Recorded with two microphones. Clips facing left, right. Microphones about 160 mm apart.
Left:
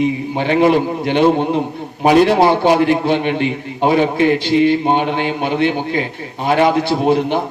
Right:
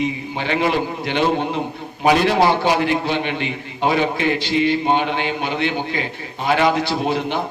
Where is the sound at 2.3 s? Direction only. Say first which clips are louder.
Left 4 dB; 50° left (ahead or behind).